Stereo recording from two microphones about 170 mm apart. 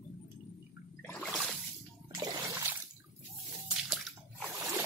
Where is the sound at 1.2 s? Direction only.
Centre (ahead or behind).